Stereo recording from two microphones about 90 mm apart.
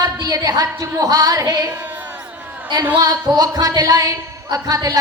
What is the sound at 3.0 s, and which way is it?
Speech, 45° right (ahead or behind).